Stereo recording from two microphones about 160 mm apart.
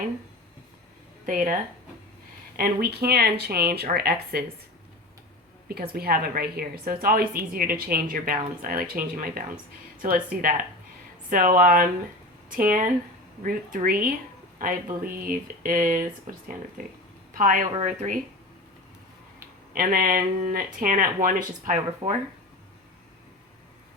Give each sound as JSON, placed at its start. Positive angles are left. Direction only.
{"t": 1.3, "sound": "speech", "side_deg": -55}
{"t": 2.6, "sound": "a woman's voice", "side_deg": -70}
{"t": 5.6, "sound": "a woman's voice", "side_deg": -75}
{"t": 11.3, "sound": "speech", "side_deg": -60}
{"t": 19.7, "sound": "speech", "side_deg": -65}